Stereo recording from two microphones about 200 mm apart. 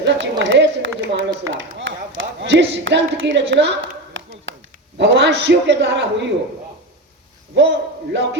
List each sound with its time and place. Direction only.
0.0 s speech: 60° right (ahead or behind)
4.9 s a man's voice: 60° right (ahead or behind)
7.5 s a man's voice: 60° right (ahead or behind)